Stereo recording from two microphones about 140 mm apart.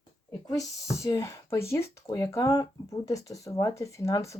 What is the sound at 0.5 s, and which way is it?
Speech, 20° left (ahead or behind).